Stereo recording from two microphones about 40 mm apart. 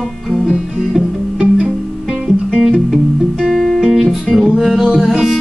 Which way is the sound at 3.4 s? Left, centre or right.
Centre.